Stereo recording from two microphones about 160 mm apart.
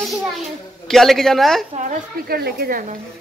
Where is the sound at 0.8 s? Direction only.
Centre (ahead or behind).